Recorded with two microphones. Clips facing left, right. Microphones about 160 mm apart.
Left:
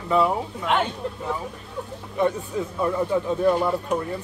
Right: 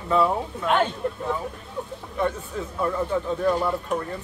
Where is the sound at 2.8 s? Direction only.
15° left (ahead or behind).